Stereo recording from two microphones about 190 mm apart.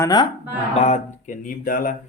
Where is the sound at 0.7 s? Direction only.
35° left (ahead or behind).